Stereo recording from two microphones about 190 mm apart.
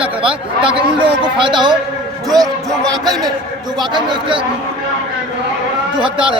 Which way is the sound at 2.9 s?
20° right (ahead or behind).